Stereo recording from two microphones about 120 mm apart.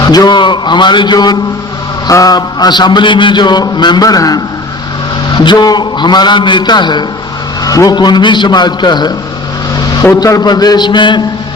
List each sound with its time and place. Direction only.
0.0 s a man's voice: 35° left (ahead or behind)